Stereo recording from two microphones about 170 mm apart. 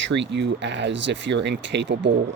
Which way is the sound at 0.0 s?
90° right.